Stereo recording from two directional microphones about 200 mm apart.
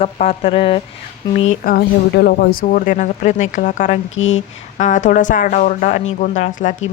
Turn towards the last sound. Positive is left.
turn(degrees=40)  # may be behind; listen again after turning